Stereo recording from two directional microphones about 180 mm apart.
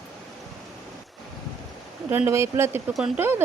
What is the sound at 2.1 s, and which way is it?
Speech, 15° right (ahead or behind).